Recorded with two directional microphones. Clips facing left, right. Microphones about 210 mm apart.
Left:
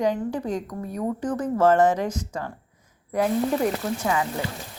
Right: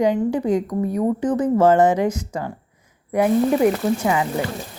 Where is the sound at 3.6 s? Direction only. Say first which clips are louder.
Right 7 dB; 15° right (ahead or behind).